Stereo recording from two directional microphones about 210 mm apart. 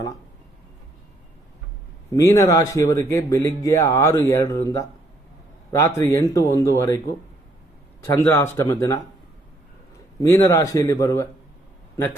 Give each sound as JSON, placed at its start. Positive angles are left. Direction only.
{"t": 2.1, "sound": "speech", "side_deg": 15}
{"t": 8.1, "sound": "speech", "side_deg": 10}
{"t": 10.2, "sound": "speech", "side_deg": 10}